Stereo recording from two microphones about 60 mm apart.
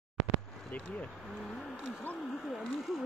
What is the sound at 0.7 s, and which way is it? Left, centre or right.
Speech, left.